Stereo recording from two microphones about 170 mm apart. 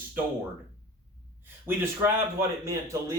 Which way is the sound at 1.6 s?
10° right (ahead or behind).